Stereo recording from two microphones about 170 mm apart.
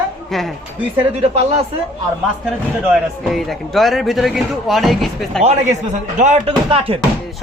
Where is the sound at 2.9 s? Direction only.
Centre (ahead or behind).